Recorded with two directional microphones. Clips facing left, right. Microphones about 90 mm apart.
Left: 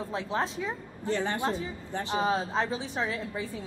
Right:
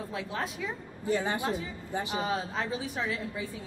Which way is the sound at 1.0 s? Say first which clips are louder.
Even; 10° right (ahead or behind).